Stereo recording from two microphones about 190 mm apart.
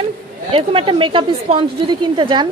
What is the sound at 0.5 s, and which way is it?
A woman's voice, 30° right (ahead or behind).